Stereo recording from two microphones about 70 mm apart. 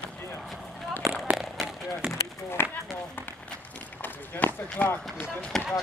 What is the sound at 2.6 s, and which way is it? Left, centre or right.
Speech, left.